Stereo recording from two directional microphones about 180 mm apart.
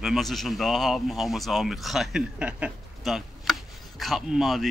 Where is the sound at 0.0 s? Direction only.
Centre (ahead or behind).